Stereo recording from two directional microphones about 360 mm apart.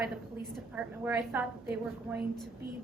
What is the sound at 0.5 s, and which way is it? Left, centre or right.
A woman's voice, centre.